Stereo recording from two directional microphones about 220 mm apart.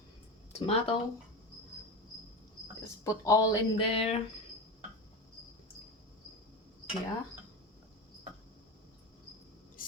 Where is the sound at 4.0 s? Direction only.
30° left (ahead or behind).